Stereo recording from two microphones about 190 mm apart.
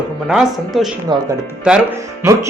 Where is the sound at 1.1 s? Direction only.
25° right (ahead or behind).